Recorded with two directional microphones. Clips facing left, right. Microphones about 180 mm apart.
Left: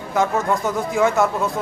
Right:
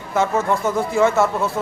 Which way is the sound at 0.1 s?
Centre (ahead or behind).